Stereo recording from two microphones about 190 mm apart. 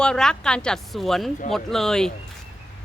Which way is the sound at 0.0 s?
5° left (ahead or behind).